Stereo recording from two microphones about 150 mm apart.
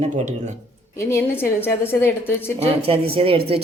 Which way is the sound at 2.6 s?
40° right (ahead or behind).